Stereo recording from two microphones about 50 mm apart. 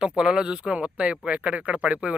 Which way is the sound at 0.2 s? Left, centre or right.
Centre.